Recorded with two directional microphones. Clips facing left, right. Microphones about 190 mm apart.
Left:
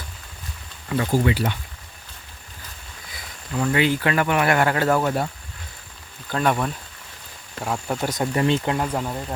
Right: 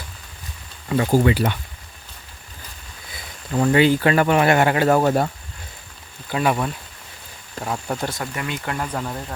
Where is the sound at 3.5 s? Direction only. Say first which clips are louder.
Right 5 dB; 35° right (ahead or behind).